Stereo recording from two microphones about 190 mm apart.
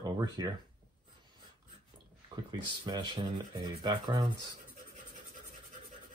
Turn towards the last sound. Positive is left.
turn(degrees=-20)  # may be behind; listen again after turning